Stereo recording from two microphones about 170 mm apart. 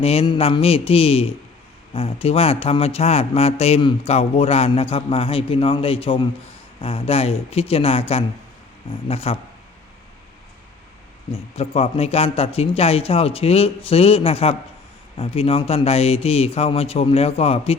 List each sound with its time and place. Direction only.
0.0 s speech: 35° left (ahead or behind)
11.3 s speech: 35° left (ahead or behind)